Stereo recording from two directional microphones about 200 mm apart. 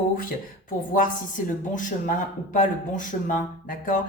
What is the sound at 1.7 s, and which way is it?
Speech, 40° left (ahead or behind).